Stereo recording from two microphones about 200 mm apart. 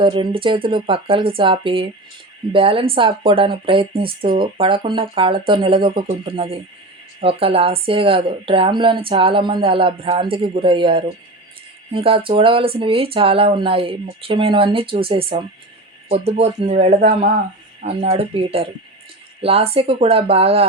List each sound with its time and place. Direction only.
0.0 s speech: 25° right (ahead or behind); by 17.9 s 40° right (ahead or behind)
18.0 s speech: 30° right (ahead or behind)